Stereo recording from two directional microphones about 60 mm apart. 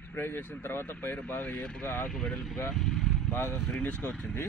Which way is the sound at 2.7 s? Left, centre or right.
Centre.